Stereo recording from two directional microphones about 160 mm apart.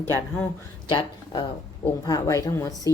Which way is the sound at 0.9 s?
30° left (ahead or behind).